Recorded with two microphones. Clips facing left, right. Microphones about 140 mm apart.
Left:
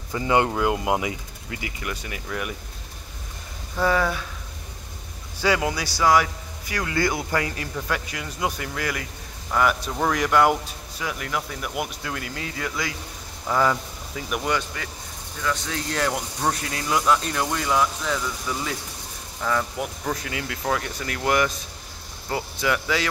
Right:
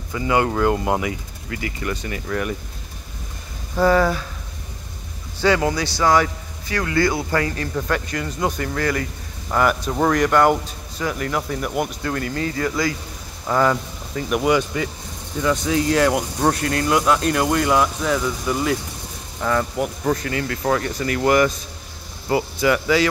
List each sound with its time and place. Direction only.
0.1 s speech: 25° left (ahead or behind)
0.5 s speech: 10° left (ahead or behind)
1.8 s speech: 5° left (ahead or behind)
3.8 s speech: centre (ahead or behind)
5.4 s speech: 10° left (ahead or behind)
14.5 s speech: 15° right (ahead or behind); by 23.0 s centre (ahead or behind)